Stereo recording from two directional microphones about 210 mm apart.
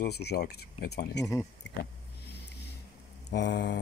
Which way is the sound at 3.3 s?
55° left (ahead or behind).